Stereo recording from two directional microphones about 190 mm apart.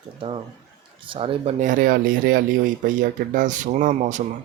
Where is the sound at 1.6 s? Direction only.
45° right (ahead or behind).